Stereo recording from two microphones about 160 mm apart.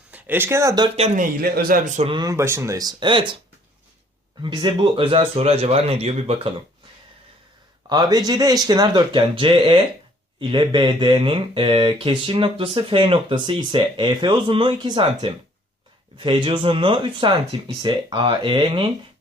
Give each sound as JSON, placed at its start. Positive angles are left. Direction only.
{"t": 0.1, "sound": "speech", "side_deg": -10}
{"t": 0.9, "sound": "speech", "side_deg": -40}
{"t": 1.2, "sound": "speech", "side_deg": -70}
{"t": 2.0, "sound": "speech", "side_deg": -30}
{"t": 4.4, "sound": "speech", "side_deg": -30}
{"t": 7.9, "sound": "speech", "side_deg": -25}